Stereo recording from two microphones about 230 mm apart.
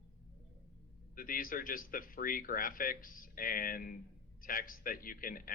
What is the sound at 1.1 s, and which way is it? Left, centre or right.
Speech, left.